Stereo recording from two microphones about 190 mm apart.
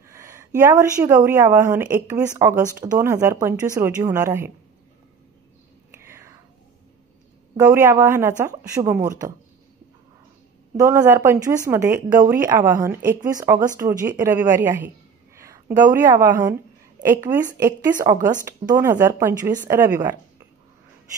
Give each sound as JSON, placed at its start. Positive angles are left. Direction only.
{"t": 0.1, "sound": "a woman's voice", "side_deg": -15}
{"t": 6.0, "sound": "whispering", "side_deg": -15}
{"t": 7.5, "sound": "a woman's voice", "side_deg": -15}
{"t": 10.8, "sound": "a woman's voice", "side_deg": -15}